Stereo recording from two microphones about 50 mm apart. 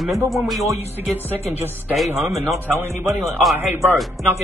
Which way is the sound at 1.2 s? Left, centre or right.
Right.